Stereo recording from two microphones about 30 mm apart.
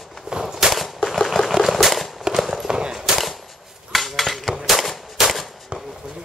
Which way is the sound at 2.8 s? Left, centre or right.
Right.